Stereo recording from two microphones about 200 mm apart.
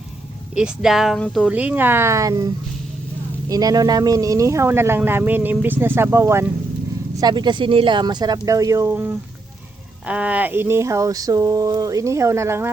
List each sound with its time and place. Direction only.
0.5 s speech: 5° right (ahead or behind)
3.5 s speech: 20° right (ahead or behind)